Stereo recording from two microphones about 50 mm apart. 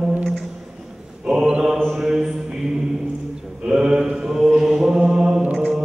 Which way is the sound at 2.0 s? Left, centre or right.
Centre.